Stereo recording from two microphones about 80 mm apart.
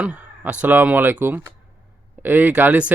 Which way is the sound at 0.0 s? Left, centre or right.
Centre.